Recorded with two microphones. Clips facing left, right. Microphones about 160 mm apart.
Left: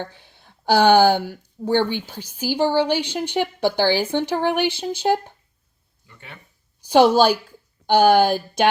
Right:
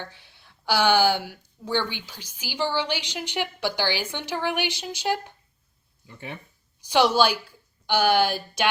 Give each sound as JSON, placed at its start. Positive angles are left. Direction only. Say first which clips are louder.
{"t": 0.0, "sound": "a woman's voice", "louder": "left 7 dB", "side_deg": 50}
{"t": 6.1, "sound": "speech", "louder": "right 6 dB", "side_deg": -20}
{"t": 6.9, "sound": "a woman's voice", "louder": "left 6 dB", "side_deg": 45}